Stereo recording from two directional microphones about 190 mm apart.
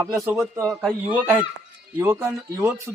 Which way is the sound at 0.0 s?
15° right (ahead or behind).